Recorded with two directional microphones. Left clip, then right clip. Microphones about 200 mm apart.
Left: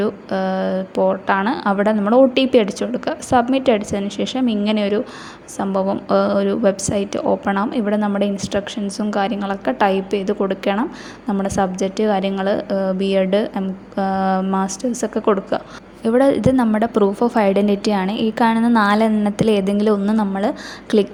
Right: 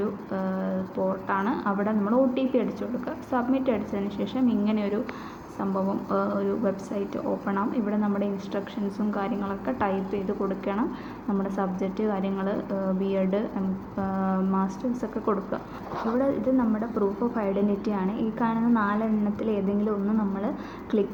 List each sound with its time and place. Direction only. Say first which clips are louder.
0.0 s a woman's voice: left 10 dB; 45° left (ahead or behind)